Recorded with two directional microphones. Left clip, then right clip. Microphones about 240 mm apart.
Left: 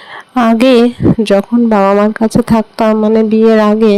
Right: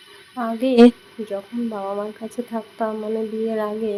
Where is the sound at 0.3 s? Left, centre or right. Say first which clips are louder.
Left 8 dB; left.